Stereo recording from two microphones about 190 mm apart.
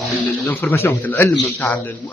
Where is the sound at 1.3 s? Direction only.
25° left (ahead or behind).